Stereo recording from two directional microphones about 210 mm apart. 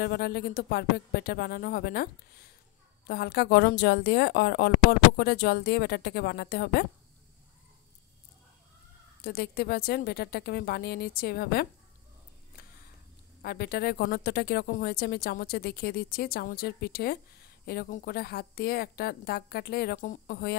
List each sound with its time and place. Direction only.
0.0 s a woman's voice: 50° left (ahead or behind)
9.2 s a woman's voice: 50° left (ahead or behind)
13.4 s a woman's voice: 45° left (ahead or behind)